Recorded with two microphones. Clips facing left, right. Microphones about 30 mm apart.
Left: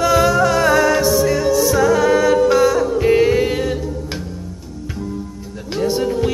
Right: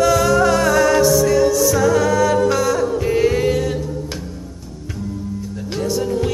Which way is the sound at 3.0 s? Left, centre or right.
Left.